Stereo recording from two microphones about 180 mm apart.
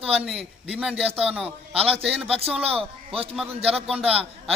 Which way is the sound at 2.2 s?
35° right (ahead or behind).